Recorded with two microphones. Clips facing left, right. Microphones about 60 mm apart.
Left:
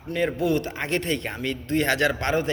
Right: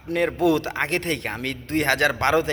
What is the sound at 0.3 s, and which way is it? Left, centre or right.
Speech, right.